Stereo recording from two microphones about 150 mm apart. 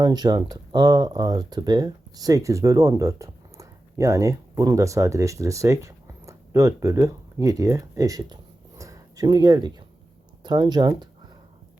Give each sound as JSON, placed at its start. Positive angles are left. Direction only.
{"t": 0.0, "sound": "speech", "side_deg": -25}
{"t": 8.8, "sound": "a sound", "side_deg": -25}
{"t": 10.4, "sound": "speech", "side_deg": -30}